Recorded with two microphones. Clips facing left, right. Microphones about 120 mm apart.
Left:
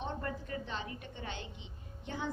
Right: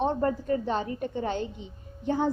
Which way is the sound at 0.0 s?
40° right (ahead or behind).